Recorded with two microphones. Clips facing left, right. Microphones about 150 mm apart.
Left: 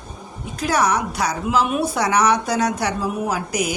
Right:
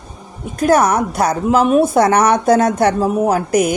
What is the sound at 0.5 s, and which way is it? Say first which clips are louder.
A woman's voice: right 7 dB; 50° right (ahead or behind).